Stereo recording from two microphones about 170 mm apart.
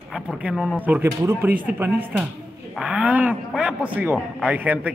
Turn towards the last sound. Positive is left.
turn(degrees=-10)  # may be behind; listen again after turning